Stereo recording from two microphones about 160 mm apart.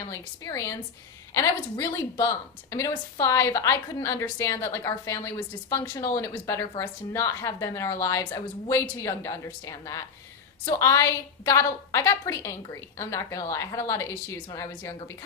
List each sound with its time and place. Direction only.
0.1 s speech: 20° left (ahead or behind)